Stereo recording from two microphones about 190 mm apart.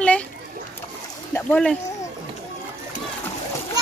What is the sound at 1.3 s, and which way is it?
Speech, 5° left (ahead or behind).